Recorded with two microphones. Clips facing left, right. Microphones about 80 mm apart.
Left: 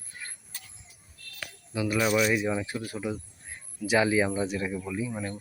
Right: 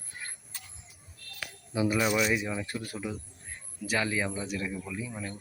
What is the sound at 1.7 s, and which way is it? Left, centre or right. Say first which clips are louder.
Speech: right 1 dB; centre.